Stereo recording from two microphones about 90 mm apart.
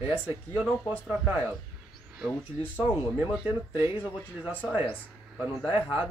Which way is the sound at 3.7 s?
25° right (ahead or behind).